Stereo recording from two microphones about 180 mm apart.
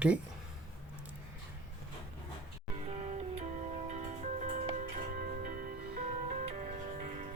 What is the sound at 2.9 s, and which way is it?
Music, 35° right (ahead or behind).